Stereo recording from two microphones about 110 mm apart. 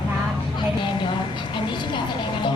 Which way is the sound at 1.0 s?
45° left (ahead or behind).